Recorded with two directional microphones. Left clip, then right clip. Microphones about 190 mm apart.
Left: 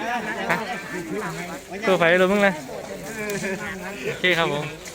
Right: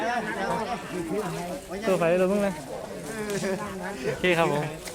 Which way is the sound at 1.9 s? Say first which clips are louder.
Left 5 dB; 15° left (ahead or behind).